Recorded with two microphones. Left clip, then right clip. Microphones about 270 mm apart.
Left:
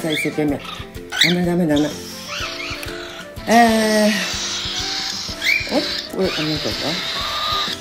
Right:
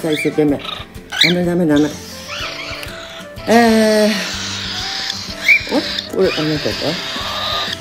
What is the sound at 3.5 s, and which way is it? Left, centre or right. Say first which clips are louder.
Music: right 2 dB; centre.